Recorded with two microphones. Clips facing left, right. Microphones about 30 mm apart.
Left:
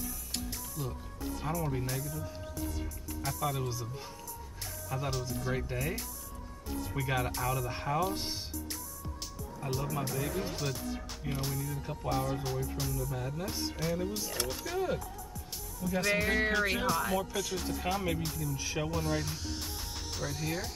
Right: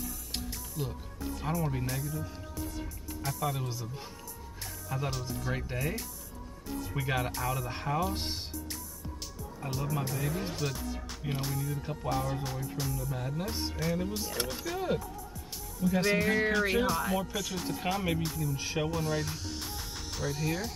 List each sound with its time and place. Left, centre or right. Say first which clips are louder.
0.3 s music: even; right
1.5 s speech: right 2 dB; centre
3.3 s speech: even; centre
4.8 s speech: even; centre
9.6 s speech: even; centre
13.7 s speech: right 1 dB; centre
16.4 s speech: right 2 dB; centre
18.9 s music: right 1 dB; centre